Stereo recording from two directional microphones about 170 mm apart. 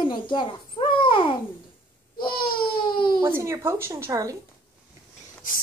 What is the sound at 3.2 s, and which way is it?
A woman's voice, 15° right (ahead or behind).